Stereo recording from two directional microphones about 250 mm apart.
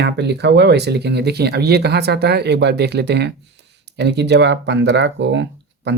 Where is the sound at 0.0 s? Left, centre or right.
Right.